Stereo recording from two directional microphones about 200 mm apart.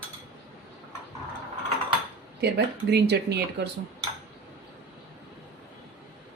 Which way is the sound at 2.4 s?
55° right (ahead or behind).